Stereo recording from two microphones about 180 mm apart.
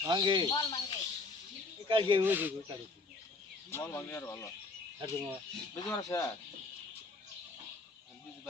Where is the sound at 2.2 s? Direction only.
10° right (ahead or behind).